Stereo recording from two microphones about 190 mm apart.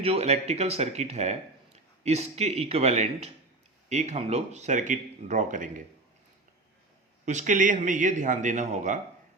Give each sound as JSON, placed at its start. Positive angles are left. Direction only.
{"t": 0.0, "sound": "speech", "side_deg": -30}
{"t": 7.3, "sound": "speech", "side_deg": -40}